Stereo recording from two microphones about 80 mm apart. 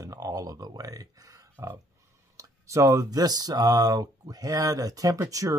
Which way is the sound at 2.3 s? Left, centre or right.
Right.